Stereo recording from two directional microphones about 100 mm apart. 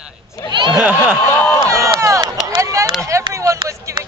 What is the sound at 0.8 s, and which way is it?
Speech, 15° right (ahead or behind).